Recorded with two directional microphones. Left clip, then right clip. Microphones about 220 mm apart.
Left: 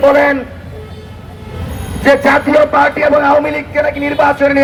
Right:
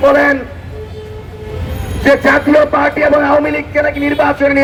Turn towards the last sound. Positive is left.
turn(degrees=25)  # may be behind; listen again after turning